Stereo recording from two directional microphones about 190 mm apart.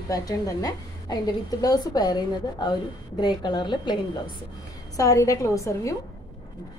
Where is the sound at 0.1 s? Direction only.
20° left (ahead or behind).